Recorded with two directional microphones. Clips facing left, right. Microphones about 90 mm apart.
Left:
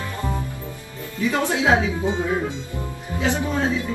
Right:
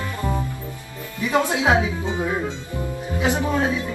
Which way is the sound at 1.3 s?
20° right (ahead or behind).